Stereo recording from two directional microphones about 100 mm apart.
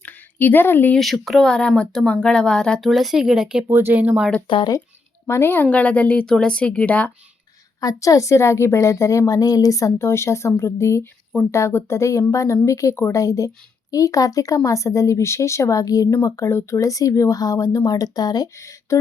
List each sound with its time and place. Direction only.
0.0 s a sound: 20° left (ahead or behind)
0.9 s speech: centre (ahead or behind)
3.7 s speech: 20° right (ahead or behind)
4.4 s speech: 55° left (ahead or behind)
5.3 s a woman's voice: 25° left (ahead or behind)
7.8 s a woman's voice: 35° left (ahead or behind)